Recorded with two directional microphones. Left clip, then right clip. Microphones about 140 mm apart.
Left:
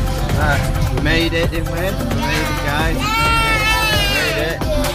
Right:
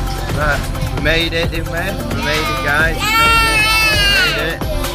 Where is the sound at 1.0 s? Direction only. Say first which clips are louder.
Right 2 dB; 25° right (ahead or behind).